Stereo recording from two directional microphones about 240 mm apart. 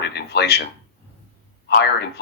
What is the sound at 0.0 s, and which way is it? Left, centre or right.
Speech, left.